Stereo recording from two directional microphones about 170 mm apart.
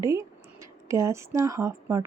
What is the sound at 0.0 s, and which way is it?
Speech, 20° right (ahead or behind).